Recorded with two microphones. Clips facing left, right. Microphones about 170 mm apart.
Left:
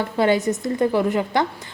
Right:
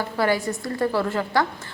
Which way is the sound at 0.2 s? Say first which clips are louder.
Left 4 dB; 20° left (ahead or behind).